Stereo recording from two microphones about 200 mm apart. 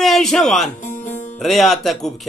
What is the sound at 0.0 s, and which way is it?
Speech, centre (ahead or behind).